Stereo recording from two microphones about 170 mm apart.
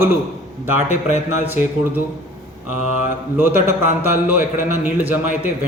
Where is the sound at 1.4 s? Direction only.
10° right (ahead or behind).